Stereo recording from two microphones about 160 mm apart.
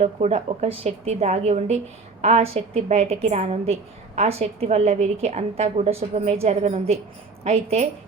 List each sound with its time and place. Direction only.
0.0 s a woman's voice: 45° right (ahead or behind)